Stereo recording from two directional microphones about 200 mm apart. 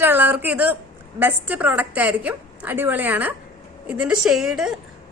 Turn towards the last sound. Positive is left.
turn(degrees=-5)  # may be behind; listen again after turning